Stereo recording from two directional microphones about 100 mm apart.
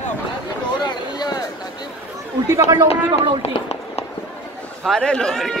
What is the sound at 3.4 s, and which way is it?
Run, 90° left.